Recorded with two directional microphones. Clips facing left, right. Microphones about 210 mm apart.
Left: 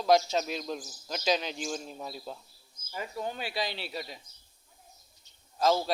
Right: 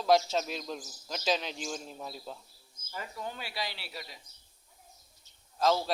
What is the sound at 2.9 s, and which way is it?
A man's voice, 15° left (ahead or behind).